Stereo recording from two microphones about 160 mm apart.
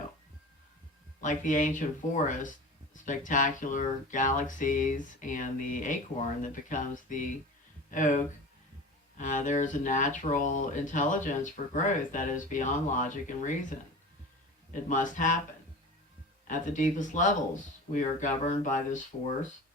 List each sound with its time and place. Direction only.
1.2 s speech: 50° left (ahead or behind)
14.8 s speech: 55° left (ahead or behind)
16.5 s speech: 50° left (ahead or behind)